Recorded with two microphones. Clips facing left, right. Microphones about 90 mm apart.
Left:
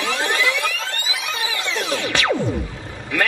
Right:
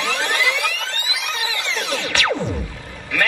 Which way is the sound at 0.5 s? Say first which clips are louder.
Even; 20° left (ahead or behind).